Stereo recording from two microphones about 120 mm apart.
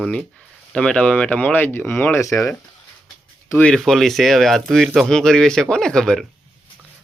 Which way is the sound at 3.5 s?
5° left (ahead or behind).